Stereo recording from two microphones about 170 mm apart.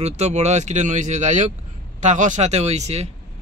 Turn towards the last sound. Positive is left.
turn(degrees=-40)  # may be behind; listen again after turning